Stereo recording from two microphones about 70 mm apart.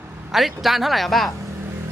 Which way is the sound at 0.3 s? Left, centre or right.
Centre.